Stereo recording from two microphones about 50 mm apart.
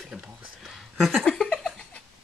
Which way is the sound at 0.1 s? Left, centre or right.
Centre.